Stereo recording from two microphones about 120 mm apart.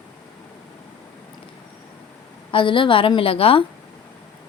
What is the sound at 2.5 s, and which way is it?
Speech, 45° left (ahead or behind).